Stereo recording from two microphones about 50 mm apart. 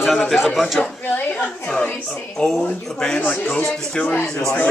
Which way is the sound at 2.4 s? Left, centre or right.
Centre.